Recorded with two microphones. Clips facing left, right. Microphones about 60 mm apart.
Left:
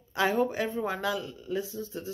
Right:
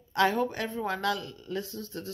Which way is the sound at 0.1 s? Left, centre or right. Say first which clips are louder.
Right 1 dB; centre.